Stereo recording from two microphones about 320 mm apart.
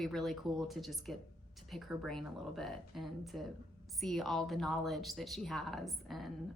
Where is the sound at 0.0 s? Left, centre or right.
Centre.